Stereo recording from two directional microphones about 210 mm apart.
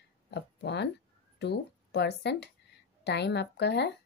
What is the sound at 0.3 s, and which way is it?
Speech, 55° left (ahead or behind).